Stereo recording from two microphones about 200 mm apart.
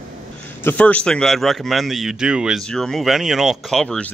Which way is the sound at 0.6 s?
10° left (ahead or behind).